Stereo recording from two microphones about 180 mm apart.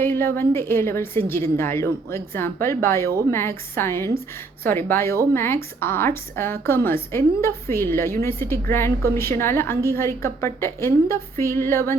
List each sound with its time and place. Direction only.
0.0 s a woman's voice: 10° left (ahead or behind)